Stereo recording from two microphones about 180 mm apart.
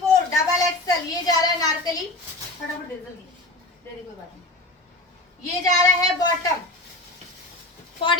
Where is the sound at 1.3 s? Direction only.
20° left (ahead or behind).